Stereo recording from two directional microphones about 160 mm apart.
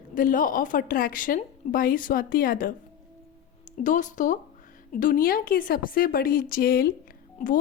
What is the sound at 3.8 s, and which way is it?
A woman's voice, 50° left (ahead or behind).